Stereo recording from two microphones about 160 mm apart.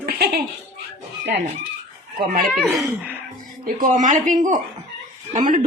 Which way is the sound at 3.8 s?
55° right (ahead or behind).